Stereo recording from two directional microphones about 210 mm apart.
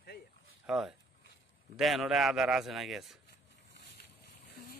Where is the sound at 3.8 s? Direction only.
50° left (ahead or behind).